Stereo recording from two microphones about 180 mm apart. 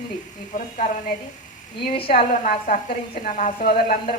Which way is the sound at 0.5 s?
50° left (ahead or behind).